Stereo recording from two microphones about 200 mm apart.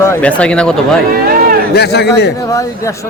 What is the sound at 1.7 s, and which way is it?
Speech, 55° left (ahead or behind).